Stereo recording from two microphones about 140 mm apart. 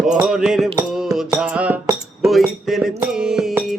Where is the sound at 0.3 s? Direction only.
5° right (ahead or behind).